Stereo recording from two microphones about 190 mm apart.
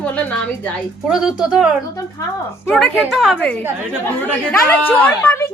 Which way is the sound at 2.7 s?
Centre (ahead or behind).